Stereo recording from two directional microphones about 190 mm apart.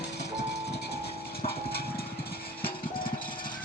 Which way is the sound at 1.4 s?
55° left (ahead or behind).